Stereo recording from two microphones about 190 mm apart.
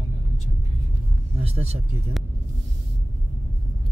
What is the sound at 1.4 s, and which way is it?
Vehicle, 30° right (ahead or behind).